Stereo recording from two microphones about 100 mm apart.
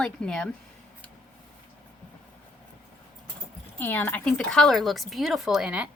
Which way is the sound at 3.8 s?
20° left (ahead or behind).